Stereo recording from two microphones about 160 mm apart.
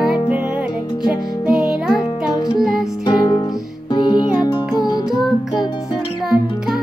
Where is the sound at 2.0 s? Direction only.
25° left (ahead or behind).